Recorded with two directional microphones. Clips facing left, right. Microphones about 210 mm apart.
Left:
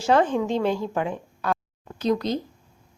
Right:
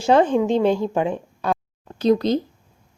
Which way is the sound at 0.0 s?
20° right (ahead or behind).